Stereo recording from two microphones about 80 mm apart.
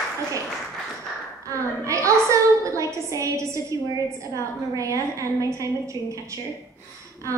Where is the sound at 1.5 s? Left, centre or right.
Right.